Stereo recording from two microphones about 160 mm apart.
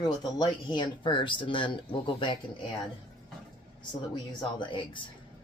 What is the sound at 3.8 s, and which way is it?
A man's voice, 30° left (ahead or behind).